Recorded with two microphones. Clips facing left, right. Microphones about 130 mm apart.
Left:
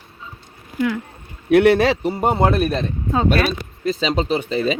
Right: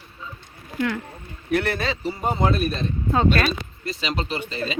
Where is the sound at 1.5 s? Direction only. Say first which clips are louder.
Left 10 dB; 75° left (ahead or behind).